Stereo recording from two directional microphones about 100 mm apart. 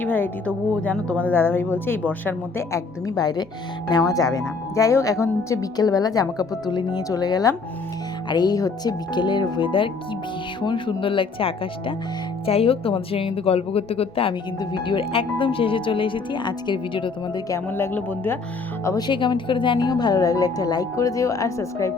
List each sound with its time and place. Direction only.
0.0 s a woman's voice: 20° left (ahead or behind)
2.7 s speech: 40° left (ahead or behind); by 11.9 s 65° left (ahead or behind)
12.5 s speech: 75° left (ahead or behind)
14.6 s speech: 55° left (ahead or behind)
17.7 s a woman's voice: 20° left (ahead or behind)
18.9 s speech: 45° left (ahead or behind)